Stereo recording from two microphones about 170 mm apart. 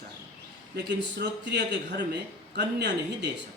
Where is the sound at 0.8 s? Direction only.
90° right.